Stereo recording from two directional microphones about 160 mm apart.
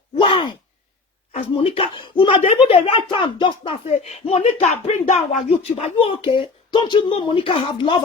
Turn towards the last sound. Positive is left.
turn(degrees=30)  # may be behind; listen again after turning